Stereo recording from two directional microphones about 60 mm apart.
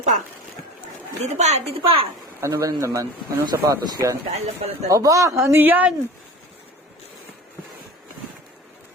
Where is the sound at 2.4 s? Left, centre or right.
Right.